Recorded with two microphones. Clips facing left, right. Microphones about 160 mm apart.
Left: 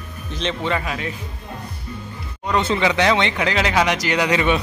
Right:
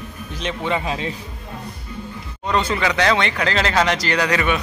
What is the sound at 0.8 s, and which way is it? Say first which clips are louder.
Speech: right 2 dB; 30° right (ahead or behind).